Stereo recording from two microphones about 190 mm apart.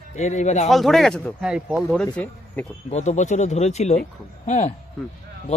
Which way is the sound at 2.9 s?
40° left (ahead or behind).